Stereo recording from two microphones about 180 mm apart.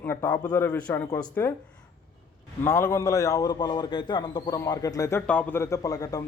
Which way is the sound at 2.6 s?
15° left (ahead or behind).